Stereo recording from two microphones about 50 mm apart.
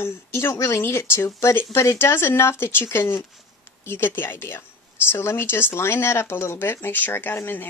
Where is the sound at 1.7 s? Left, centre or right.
Left.